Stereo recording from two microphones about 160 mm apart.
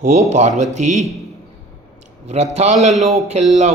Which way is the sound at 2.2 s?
45° right (ahead or behind).